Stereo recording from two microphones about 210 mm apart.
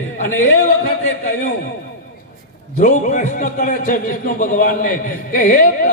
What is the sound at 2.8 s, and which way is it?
A man's voice, 35° left (ahead or behind).